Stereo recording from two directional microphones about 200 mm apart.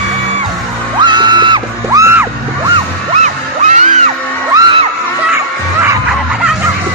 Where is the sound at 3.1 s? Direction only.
35° right (ahead or behind).